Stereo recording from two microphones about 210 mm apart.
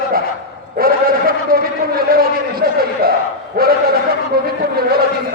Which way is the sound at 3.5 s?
45° right (ahead or behind).